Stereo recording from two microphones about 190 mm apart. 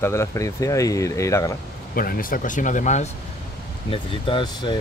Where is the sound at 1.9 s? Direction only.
50° left (ahead or behind).